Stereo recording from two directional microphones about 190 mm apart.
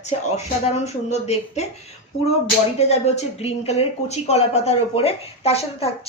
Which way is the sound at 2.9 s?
35° left (ahead or behind).